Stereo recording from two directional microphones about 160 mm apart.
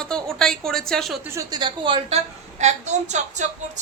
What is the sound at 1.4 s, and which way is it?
A woman's voice, 25° right (ahead or behind).